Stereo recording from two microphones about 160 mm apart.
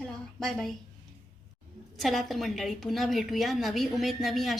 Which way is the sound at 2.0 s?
Centre (ahead or behind).